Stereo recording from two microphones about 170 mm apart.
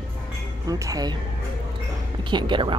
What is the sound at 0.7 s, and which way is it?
Speech, 20° right (ahead or behind).